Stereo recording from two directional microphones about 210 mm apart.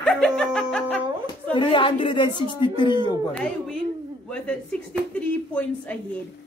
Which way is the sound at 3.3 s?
5° left (ahead or behind).